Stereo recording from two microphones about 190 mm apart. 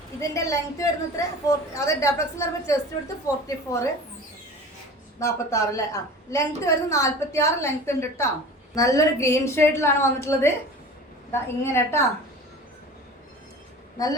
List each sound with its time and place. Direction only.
0.2 s a woman's voice: 15° left (ahead or behind)
5.2 s a woman's voice: 15° left (ahead or behind)
14.0 s a woman's voice: 20° left (ahead or behind)